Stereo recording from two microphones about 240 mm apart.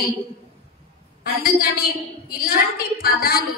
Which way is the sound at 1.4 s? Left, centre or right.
Left.